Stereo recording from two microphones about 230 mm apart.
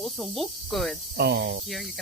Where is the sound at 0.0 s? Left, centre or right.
Centre.